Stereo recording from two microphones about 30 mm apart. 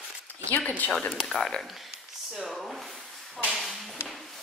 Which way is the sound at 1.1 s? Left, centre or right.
Centre.